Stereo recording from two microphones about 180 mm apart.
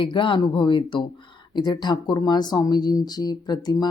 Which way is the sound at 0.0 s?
25° left (ahead or behind).